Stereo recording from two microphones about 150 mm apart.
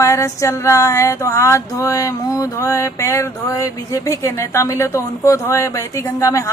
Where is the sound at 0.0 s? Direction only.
20° left (ahead or behind).